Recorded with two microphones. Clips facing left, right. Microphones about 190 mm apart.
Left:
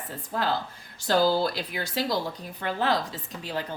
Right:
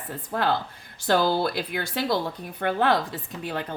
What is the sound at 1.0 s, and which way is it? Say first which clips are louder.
A woman's voice: even; 55° right (ahead or behind).